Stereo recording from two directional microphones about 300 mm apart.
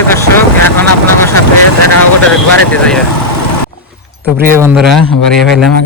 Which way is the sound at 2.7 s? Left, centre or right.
Centre.